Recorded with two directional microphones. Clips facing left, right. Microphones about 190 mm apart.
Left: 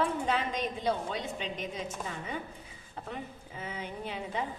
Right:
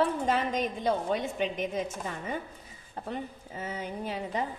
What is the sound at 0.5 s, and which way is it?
A woman's voice, 50° right (ahead or behind).